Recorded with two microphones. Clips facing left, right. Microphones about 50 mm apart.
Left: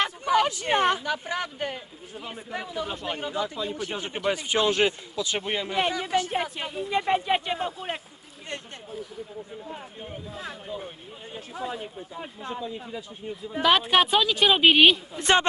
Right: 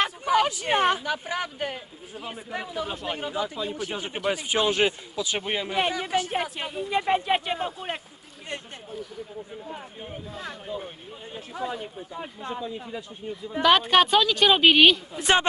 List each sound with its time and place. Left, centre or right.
0.0 s a sound: right
0.6 s a man's voice: centre
6.2 s speech: centre
10.3 s speech: centre
15.1 s a man's voice: centre